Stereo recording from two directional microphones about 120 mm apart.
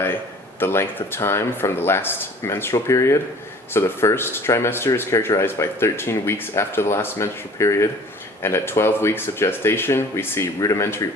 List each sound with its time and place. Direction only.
0.6 s speech: 20° left (ahead or behind)